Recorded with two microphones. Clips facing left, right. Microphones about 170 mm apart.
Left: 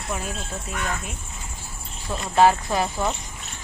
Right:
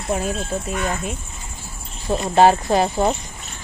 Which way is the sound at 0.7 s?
25° right (ahead or behind).